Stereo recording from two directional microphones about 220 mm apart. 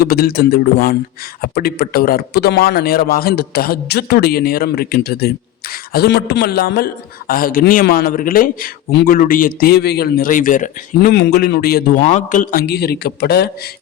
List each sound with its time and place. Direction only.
0.0 s a man's voice: 45° left (ahead or behind)
12.0 s a man's voice: 35° left (ahead or behind)